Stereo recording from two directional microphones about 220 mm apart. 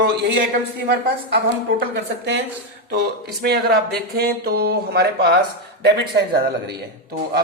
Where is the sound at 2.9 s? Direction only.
45° right (ahead or behind).